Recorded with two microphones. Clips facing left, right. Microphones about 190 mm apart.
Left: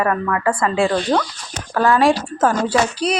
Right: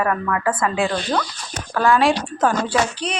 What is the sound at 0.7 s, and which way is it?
Speech, 30° left (ahead or behind).